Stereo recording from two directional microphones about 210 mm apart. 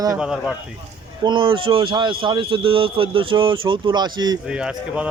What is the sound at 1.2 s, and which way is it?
A man's voice, 20° right (ahead or behind).